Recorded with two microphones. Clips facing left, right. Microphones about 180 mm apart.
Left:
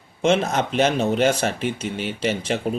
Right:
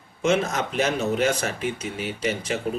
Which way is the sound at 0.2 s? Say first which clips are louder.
Left 3 dB; 30° left (ahead or behind).